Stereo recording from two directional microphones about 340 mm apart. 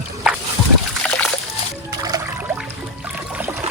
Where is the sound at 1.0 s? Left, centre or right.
Centre.